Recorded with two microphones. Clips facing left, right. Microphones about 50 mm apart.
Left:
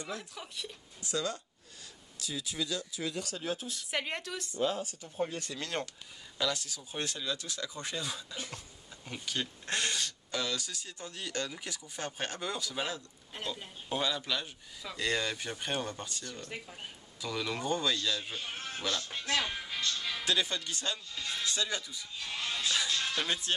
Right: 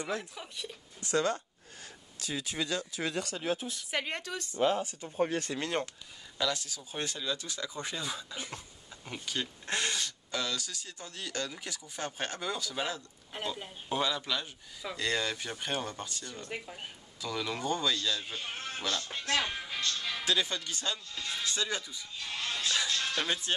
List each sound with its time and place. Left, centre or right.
0.2 s speech: centre
1.0 s speech: right
3.3 s speech: right
3.9 s speech: centre
4.6 s speech: right
6.3 s speech: centre
13.3 s speech: centre
16.3 s speech: centre
17.2 s speech: centre
19.4 s music: centre
19.9 s speech: centre